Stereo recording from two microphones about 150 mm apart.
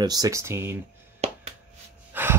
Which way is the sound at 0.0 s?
25° right (ahead or behind).